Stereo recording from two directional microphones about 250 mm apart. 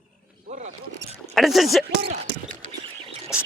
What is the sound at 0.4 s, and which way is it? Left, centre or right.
Wild animals, right.